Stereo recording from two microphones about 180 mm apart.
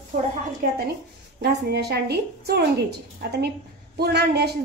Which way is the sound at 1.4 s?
65° right (ahead or behind).